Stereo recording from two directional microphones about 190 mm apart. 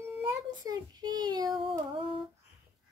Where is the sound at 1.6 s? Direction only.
25° right (ahead or behind).